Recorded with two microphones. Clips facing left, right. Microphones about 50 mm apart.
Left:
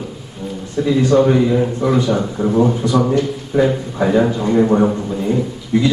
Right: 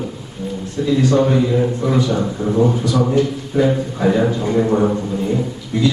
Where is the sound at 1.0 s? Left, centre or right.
Left.